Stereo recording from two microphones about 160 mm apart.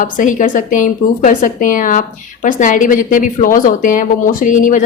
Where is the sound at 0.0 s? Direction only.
55° left (ahead or behind).